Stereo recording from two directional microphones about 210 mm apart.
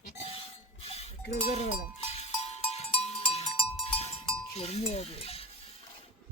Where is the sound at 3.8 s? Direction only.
30° left (ahead or behind).